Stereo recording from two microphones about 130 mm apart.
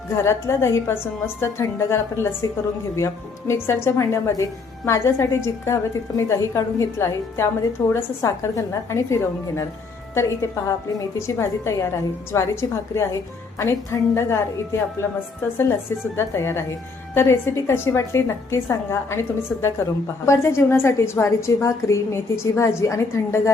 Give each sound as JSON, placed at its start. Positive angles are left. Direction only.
{"t": 0.2, "sound": "a woman's voice", "side_deg": 20}